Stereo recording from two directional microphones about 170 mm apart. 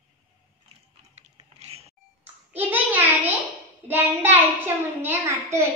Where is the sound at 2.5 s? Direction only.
10° right (ahead or behind).